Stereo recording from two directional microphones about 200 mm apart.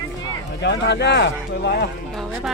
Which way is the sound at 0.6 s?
60° left (ahead or behind).